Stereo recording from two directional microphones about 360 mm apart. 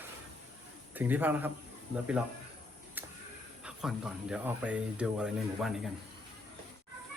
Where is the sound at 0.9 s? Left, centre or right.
Centre.